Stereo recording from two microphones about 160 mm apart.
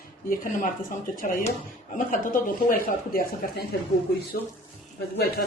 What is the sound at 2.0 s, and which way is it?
Speech, 55° left (ahead or behind).